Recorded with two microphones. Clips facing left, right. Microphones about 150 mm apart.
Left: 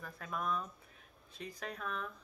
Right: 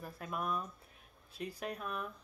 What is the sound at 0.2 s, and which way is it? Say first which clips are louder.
Speech: even; 10° right (ahead or behind).